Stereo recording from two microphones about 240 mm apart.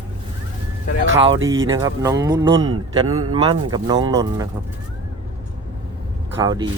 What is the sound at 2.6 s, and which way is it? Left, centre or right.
Speech, right.